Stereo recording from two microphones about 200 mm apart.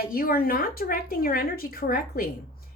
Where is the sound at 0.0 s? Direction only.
45° left (ahead or behind).